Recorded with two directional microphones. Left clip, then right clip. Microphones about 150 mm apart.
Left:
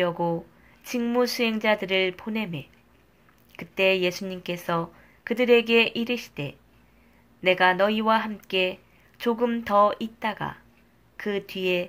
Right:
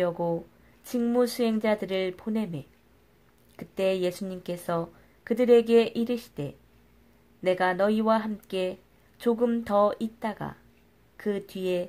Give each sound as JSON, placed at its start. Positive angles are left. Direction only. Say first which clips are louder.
{"t": 0.0, "sound": "speech", "louder": "left 2 dB", "side_deg": -35}
{"t": 3.5, "sound": "speech", "louder": "left 4 dB", "side_deg": -40}